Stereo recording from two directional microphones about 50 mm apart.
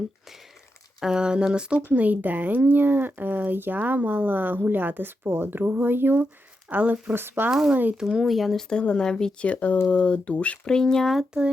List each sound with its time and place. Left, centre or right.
1.0 s speech: centre
1.8 s speech: right
6.7 s speech: right
7.1 s speech: right
8.0 s speech: centre
8.7 s speech: centre
9.4 s speech: left
10.7 s speech: centre
11.0 s speech: centre